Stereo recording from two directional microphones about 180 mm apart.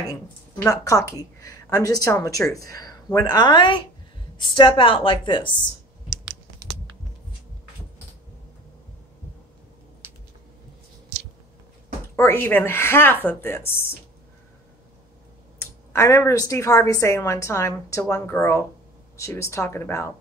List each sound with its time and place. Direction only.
0.1 s a woman's voice: 20° left (ahead or behind)
12.2 s a woman's voice: 10° left (ahead or behind)
15.9 s a woman's voice: 15° left (ahead or behind)